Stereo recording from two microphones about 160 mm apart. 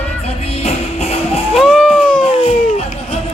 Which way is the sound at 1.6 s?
5° left (ahead or behind).